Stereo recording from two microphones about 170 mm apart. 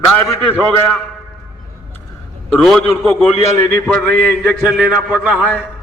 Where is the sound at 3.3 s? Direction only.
40° left (ahead or behind).